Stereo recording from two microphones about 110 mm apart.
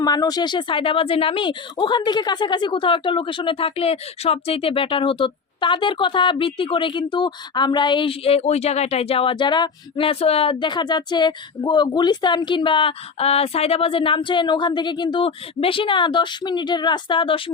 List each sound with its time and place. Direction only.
0.0 s speech: 35° left (ahead or behind)